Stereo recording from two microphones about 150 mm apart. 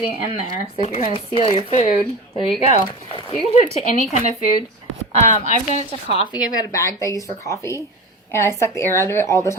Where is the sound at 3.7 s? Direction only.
55° left (ahead or behind).